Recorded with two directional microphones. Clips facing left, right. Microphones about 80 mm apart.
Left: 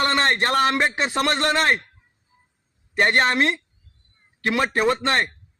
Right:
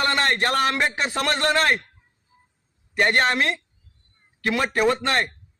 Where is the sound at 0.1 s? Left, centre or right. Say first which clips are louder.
Left 1 dB; left.